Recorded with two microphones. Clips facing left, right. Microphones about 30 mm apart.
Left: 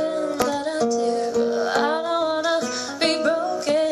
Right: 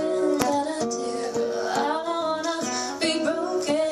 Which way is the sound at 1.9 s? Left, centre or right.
Left.